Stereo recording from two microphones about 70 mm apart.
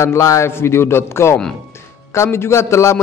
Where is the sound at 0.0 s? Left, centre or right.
Left.